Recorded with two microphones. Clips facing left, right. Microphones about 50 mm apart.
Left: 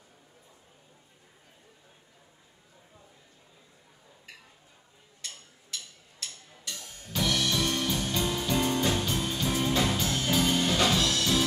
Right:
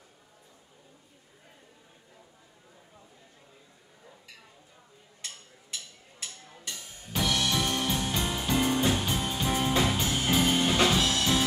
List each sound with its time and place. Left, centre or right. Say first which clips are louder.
5.2 s music: even; centre